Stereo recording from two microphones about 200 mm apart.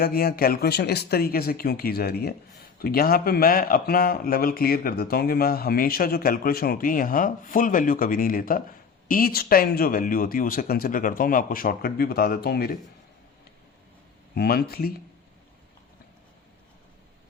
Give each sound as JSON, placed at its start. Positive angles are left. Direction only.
{"t": 0.0, "sound": "a man's voice", "side_deg": 50}
{"t": 14.3, "sound": "a man's voice", "side_deg": 50}